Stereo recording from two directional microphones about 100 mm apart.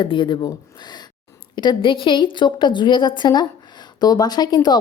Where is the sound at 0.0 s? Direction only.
50° left (ahead or behind).